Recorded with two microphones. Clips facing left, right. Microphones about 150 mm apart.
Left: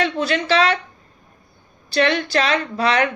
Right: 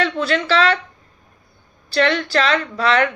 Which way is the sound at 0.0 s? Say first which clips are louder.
Right 1 dB; 20° left (ahead or behind).